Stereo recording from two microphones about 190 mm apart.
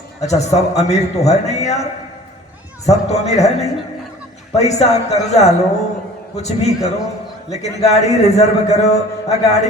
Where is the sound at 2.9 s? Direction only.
35° left (ahead or behind).